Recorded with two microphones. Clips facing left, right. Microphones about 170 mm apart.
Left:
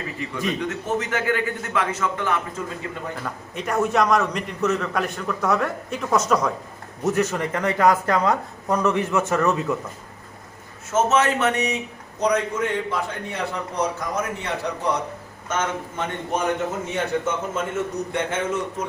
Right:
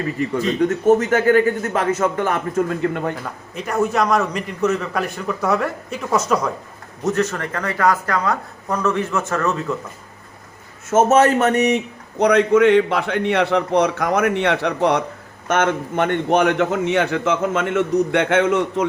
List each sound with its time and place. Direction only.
0.2 s a man's voice: 45° right (ahead or behind); by 3.2 s 65° right (ahead or behind)
3.5 s a man's voice: centre (ahead or behind)
7.0 s speech: 10° left (ahead or behind)
10.9 s a man's voice: 45° right (ahead or behind)
12.2 s a man's voice: 70° right (ahead or behind)